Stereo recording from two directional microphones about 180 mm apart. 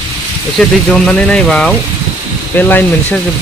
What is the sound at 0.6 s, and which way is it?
Speech, centre (ahead or behind).